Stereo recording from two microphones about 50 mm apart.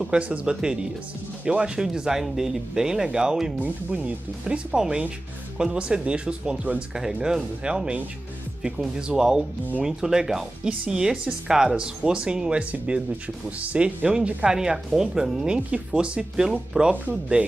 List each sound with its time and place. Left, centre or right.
0.0 s speech: right
15.4 s speech: centre